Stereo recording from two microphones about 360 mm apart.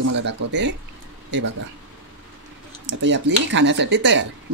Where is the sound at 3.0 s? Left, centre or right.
Right.